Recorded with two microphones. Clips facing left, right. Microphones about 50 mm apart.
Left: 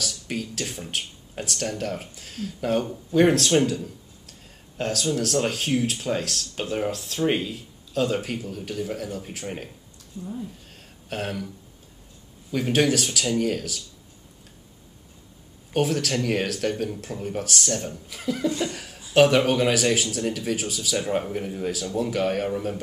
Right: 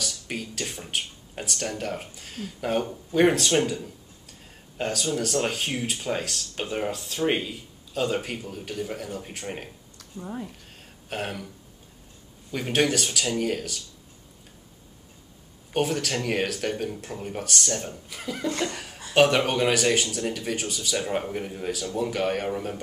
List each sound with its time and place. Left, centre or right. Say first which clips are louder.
0.0 s speech: left 2 dB; centre
10.1 s speech: left 1 dB; right
10.7 s a sound: left 1 dB; centre
12.4 s speech: left 3 dB; centre
15.7 s speech: left 2 dB; centre
18.7 s chuckle: even; centre
19.1 s speech: left 2 dB; centre